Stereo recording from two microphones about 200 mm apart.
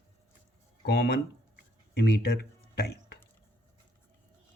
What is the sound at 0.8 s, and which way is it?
Speech, 60° left (ahead or behind).